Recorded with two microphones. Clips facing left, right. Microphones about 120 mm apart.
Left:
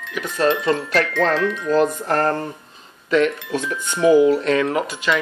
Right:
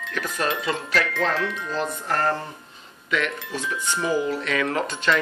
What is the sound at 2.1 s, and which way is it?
Speech, 45° left (ahead or behind).